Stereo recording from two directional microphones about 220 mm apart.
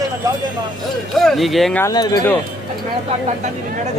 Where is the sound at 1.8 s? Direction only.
15° left (ahead or behind).